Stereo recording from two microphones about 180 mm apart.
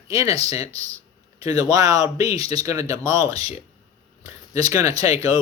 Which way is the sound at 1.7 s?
20° right (ahead or behind).